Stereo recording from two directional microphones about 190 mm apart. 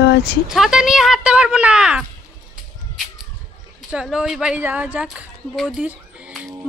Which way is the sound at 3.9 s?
5° right (ahead or behind).